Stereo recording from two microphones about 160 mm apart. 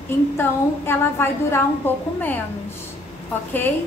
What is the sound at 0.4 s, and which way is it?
A woman's voice, 15° left (ahead or behind).